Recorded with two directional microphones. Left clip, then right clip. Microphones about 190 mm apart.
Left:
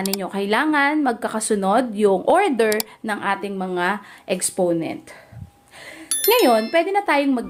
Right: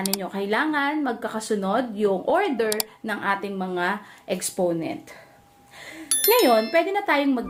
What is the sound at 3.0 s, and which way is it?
A woman's voice, 25° left (ahead or behind).